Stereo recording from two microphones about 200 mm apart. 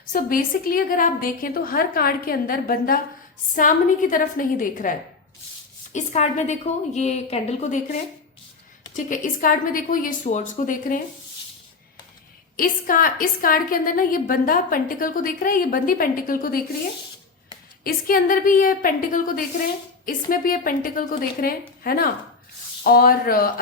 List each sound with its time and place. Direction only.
0.1 s a woman's voice: 45° left (ahead or behind)
12.5 s a woman's voice: 45° left (ahead or behind)
17.8 s a woman's voice: 45° left (ahead or behind)